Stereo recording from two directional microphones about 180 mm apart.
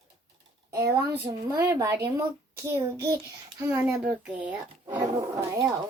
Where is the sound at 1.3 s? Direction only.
15° right (ahead or behind).